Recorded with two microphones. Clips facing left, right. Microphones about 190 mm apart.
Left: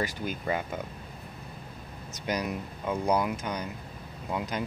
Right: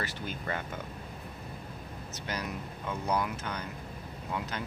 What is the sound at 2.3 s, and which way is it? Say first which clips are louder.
Speech: left 6 dB; 15° left (ahead or behind).